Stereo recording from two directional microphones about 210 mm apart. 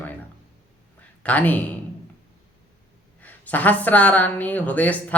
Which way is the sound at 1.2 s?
5° left (ahead or behind).